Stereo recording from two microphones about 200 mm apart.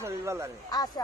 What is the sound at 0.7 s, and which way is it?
Speech, 20° left (ahead or behind).